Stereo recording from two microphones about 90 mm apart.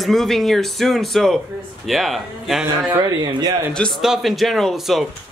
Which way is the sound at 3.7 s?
10° left (ahead or behind).